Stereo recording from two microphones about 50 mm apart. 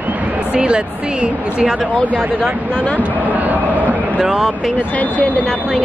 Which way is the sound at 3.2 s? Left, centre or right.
Right.